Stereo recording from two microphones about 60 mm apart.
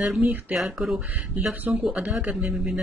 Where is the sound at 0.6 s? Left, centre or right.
Centre.